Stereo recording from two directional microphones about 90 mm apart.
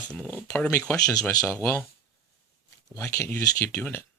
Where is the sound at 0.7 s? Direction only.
30° left (ahead or behind).